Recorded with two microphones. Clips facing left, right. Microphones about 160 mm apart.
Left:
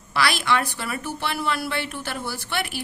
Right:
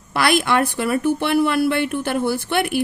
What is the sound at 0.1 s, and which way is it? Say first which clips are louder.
Speech: right 5 dB; 55° right (ahead or behind).